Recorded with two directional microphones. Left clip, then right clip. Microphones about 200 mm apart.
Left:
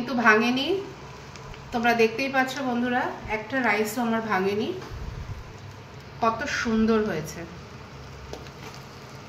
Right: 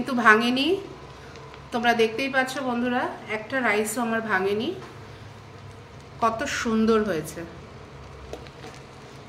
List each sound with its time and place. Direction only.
0.2 s a woman's voice: 40° right (ahead or behind)
1.7 s a woman's voice: 35° right (ahead or behind)
6.2 s speech: 45° right (ahead or behind)